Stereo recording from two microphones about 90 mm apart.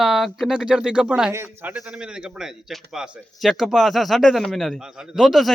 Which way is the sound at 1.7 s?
10° right (ahead or behind).